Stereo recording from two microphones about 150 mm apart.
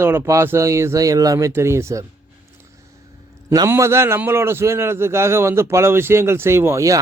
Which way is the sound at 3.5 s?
20° right (ahead or behind).